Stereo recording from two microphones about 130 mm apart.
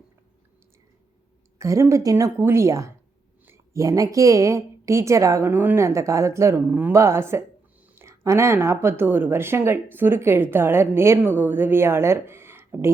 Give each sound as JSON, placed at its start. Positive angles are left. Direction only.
{"t": 1.5, "sound": "speech", "side_deg": -25}